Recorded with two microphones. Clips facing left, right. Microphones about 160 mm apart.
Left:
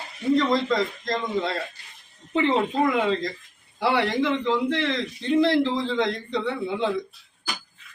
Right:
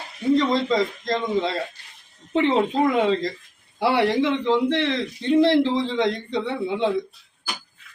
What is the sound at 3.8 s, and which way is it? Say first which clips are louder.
Speech: right 3 dB; 30° right (ahead or behind).